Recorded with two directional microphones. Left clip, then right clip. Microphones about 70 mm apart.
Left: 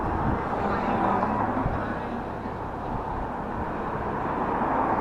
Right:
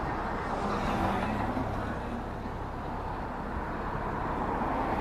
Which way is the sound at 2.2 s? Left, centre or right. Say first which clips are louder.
Left 5 dB; right.